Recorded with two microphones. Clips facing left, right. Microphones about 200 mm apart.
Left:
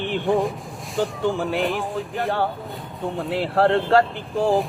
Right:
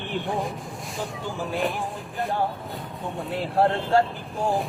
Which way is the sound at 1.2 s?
70° left (ahead or behind).